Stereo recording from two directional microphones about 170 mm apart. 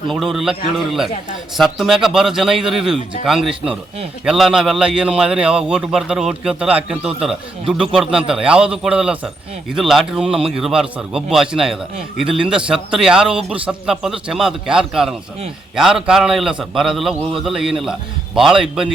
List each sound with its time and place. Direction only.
0.1 s a man's voice: centre (ahead or behind)
1.5 s a man's voice: centre (ahead or behind)
17.2 s a man's voice: 30° right (ahead or behind)
17.4 s a man's voice: 5° right (ahead or behind)